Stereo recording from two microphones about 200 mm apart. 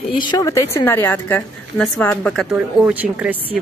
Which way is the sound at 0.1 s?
20° left (ahead or behind).